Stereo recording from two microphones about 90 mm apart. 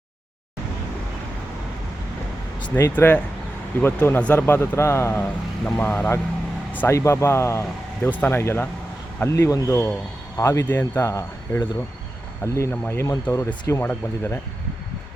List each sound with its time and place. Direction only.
2.9 s a man's voice: 20° left (ahead or behind)
5.6 s speech: 15° left (ahead or behind)
6.7 s a man's voice: 30° left (ahead or behind)
10.7 s a man's voice: 20° left (ahead or behind)
11.0 s a man's voice: 35° left (ahead or behind)